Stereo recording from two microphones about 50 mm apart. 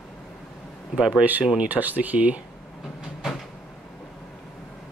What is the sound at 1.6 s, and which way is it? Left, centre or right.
Speech, right.